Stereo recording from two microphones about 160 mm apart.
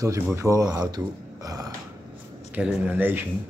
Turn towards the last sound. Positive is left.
turn(degrees=-10)  # may be behind; listen again after turning